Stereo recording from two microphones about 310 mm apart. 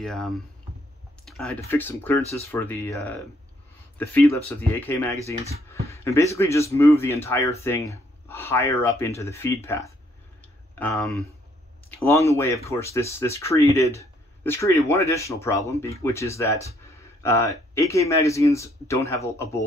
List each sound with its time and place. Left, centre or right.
0.0 s speech: centre
1.2 s a sound: centre
1.7 s speech: centre